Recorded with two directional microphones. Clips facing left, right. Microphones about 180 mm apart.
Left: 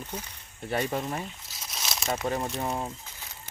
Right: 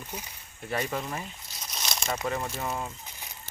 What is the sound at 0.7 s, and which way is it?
Speech, 25° left (ahead or behind).